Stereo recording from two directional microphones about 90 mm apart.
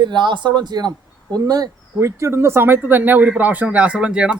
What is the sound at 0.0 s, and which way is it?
Speech, 60° right (ahead or behind).